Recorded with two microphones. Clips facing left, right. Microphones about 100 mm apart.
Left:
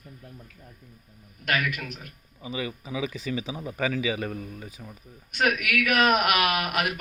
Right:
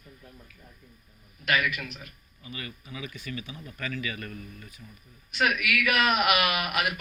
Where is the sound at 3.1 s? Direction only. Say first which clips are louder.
Left 7 dB; 90° left.